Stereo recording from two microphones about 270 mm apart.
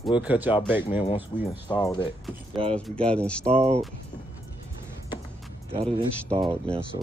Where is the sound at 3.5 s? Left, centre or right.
Right.